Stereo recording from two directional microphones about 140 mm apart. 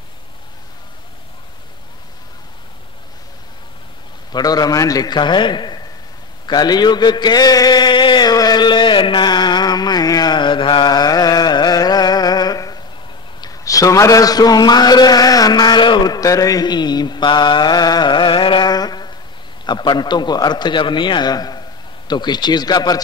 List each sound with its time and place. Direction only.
4.3 s a man's voice: 30° left (ahead or behind)
6.4 s a sound: 30° left (ahead or behind)
13.4 s a man's voice: 25° left (ahead or behind)